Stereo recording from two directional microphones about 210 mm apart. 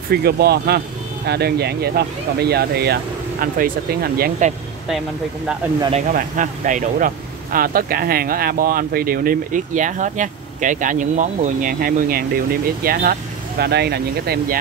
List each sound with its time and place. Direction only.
0.1 s speech: 50° right (ahead or behind)
5.8 s speech: 25° right (ahead or behind)
6.1 s speech: 40° right (ahead or behind)